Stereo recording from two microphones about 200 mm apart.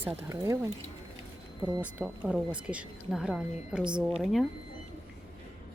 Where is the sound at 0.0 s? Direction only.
10° right (ahead or behind).